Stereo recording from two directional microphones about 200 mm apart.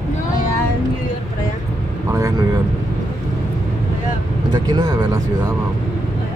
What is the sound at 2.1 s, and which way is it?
Speech, 15° right (ahead or behind).